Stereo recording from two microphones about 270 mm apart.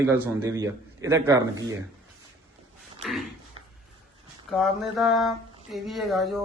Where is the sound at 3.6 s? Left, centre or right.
Centre.